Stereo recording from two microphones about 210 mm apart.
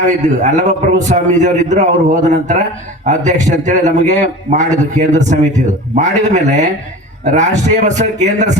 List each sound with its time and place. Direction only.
0.0 s a man's voice: 35° right (ahead or behind)